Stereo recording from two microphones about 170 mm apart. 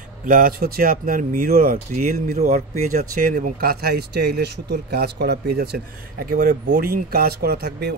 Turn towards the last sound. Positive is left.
turn(degrees=-70)  # may be behind; listen again after turning